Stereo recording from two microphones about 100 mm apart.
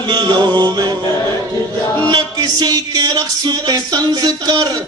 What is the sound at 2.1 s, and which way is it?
Music, 45° right (ahead or behind).